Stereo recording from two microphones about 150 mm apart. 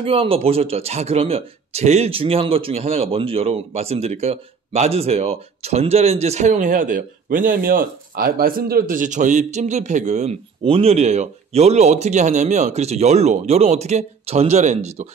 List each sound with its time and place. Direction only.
0.0 s speech: 40° right (ahead or behind)